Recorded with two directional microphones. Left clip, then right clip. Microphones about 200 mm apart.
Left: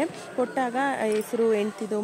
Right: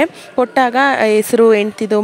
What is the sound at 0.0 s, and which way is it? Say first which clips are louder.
Speech: right 12 dB; 55° right (ahead or behind).